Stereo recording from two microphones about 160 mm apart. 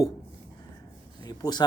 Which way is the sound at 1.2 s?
25° left (ahead or behind).